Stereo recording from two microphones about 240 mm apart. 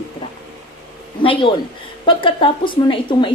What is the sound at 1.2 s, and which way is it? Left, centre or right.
A man's voice, left.